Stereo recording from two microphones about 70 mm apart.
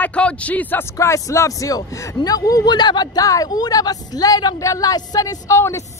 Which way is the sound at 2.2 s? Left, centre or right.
Left.